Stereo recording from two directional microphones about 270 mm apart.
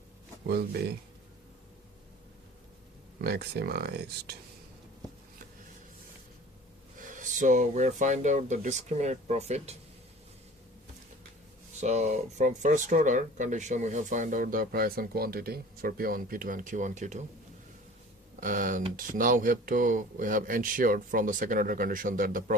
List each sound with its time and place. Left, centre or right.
0.4 s speech: right
3.2 s speech: right
7.0 s speech: right
11.8 s speech: right
18.3 s speech: right